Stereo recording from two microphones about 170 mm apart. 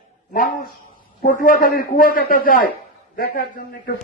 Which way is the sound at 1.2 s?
55° left (ahead or behind).